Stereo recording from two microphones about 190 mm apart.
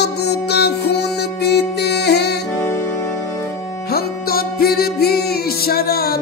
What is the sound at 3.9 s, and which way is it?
Music, 55° left (ahead or behind).